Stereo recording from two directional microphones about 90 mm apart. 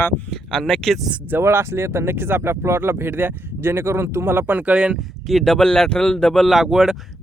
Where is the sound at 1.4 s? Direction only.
30° right (ahead or behind); by 5.0 s 10° right (ahead or behind).